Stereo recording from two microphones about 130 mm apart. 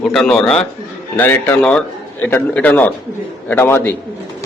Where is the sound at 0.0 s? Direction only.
Centre (ahead or behind).